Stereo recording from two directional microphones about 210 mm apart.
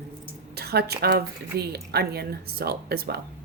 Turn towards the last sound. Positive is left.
turn(degrees=-50)  # may be behind; listen again after turning